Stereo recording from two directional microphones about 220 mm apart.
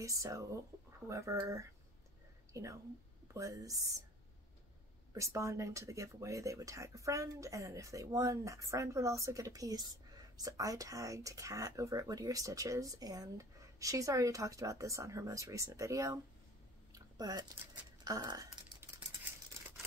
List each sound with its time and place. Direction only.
0.0 s speech: 15° right (ahead or behind)
5.1 s speech: 15° right (ahead or behind)
16.9 s typing: 15° right (ahead or behind)
18.0 s a sound: 15° right (ahead or behind)